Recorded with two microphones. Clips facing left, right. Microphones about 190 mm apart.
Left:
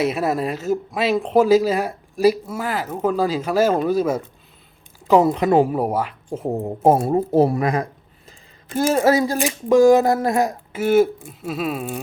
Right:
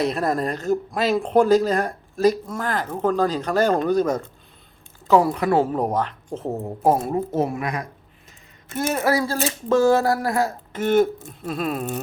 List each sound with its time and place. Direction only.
0.0 s speech: 5° left (ahead or behind)
5.0 s speech: 20° left (ahead or behind)
7.1 s speech: 35° left (ahead or behind); by 11.9 s 5° left (ahead or behind)